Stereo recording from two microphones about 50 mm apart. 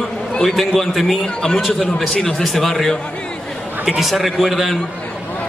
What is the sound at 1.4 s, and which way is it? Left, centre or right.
A man's voice, centre.